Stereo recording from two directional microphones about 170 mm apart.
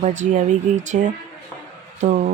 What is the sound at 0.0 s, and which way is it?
Speech, 45° right (ahead or behind).